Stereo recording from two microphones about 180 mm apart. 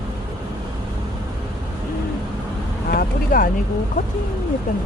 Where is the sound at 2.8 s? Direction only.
50° left (ahead or behind).